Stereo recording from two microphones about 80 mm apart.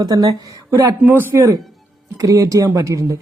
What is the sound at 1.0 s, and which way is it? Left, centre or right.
Speech, right.